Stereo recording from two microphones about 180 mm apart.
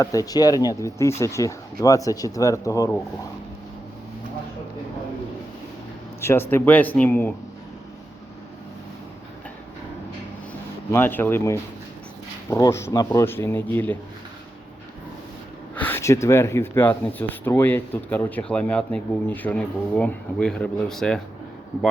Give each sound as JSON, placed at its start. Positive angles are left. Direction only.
{"t": 0.0, "sound": "speech", "side_deg": 20}
{"t": 6.2, "sound": "speech", "side_deg": 10}
{"t": 10.9, "sound": "speech", "side_deg": 10}
{"t": 15.7, "sound": "speech", "side_deg": 10}